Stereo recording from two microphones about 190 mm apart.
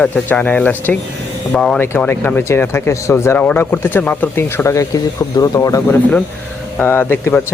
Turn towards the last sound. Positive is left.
turn(degrees=10)  # may be behind; listen again after turning